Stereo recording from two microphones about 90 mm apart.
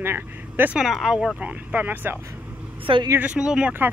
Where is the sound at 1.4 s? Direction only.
15° right (ahead or behind).